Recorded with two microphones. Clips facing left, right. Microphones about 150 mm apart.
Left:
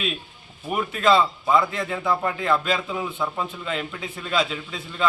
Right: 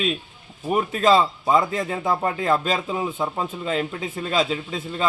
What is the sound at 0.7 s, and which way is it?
Speech, 35° right (ahead or behind).